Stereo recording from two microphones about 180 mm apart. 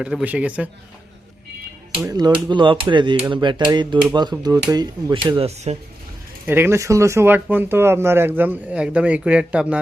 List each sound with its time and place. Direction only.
0.0 s speech: 5° right (ahead or behind)
2.0 s speech: 20° right (ahead or behind)
5.3 s speech: 35° right (ahead or behind)
6.4 s speech: 10° right (ahead or behind)